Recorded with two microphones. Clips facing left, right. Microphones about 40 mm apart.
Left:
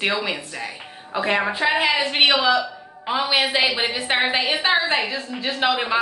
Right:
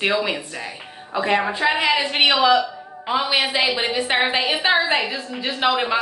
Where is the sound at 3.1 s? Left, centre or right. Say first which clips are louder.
Even; centre.